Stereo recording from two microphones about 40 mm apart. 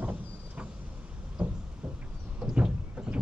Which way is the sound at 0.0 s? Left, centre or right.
Right.